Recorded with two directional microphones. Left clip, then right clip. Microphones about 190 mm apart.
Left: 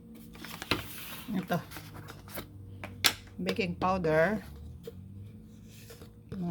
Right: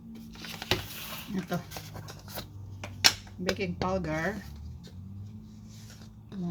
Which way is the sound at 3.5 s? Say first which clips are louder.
Left 1 dB; 45° left (ahead or behind).